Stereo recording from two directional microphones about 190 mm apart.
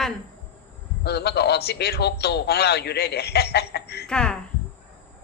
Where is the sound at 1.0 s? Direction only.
60° left (ahead or behind).